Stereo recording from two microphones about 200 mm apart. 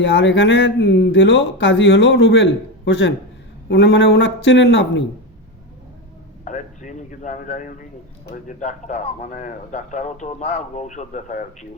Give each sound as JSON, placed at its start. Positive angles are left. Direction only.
{"t": 0.0, "sound": "a man's voice", "side_deg": 60}
{"t": 6.4, "sound": "a man's voice", "side_deg": 40}